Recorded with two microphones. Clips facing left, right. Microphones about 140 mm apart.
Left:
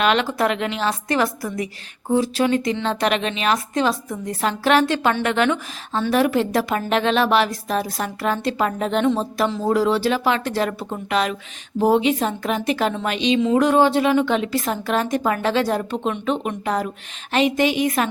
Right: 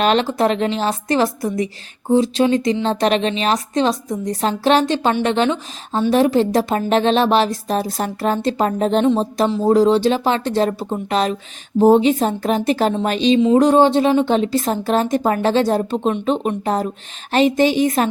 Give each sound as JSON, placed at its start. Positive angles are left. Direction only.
{"t": 0.0, "sound": "a woman's voice", "side_deg": -35}
{"t": 9.0, "sound": "a woman's voice", "side_deg": -20}